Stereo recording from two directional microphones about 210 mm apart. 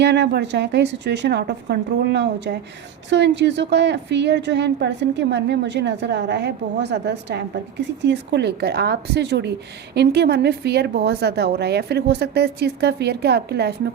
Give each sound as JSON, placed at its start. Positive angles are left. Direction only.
{"t": 0.0, "sound": "a woman's voice", "side_deg": -55}